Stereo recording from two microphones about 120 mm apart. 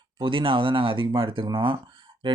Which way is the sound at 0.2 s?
45° right (ahead or behind).